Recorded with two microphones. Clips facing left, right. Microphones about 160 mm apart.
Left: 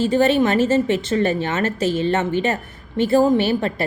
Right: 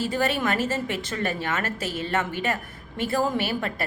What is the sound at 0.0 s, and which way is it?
A woman's voice, 25° left (ahead or behind).